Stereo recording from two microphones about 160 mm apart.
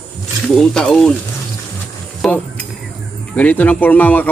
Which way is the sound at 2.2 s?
Centre (ahead or behind).